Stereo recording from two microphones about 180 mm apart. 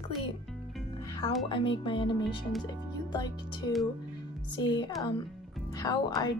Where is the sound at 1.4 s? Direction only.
30° left (ahead or behind).